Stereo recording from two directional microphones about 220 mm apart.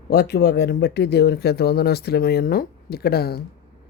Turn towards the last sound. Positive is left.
turn(degrees=45)  # may be behind; listen again after turning